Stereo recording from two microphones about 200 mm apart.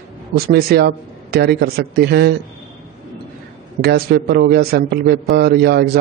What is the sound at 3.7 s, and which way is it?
A man's voice, 50° right (ahead or behind).